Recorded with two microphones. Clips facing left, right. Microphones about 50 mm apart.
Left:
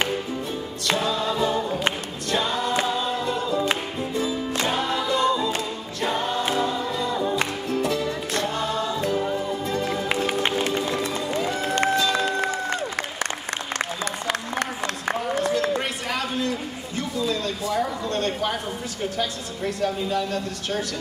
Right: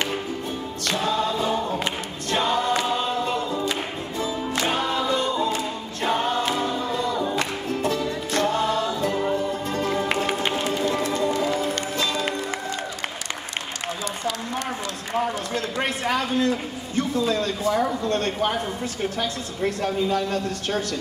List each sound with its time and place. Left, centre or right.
2.3 s choir: right
4.6 s a capella: right
6.0 s choir: right
8.4 s music: right
10.6 s music: left
11.0 s music: right
15.8 s a sound: right
19.1 s speech: right